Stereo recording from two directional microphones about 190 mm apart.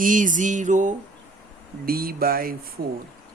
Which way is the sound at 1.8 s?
50° right (ahead or behind).